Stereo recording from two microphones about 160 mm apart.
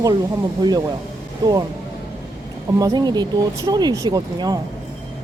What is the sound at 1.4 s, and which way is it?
Speech, 25° right (ahead or behind).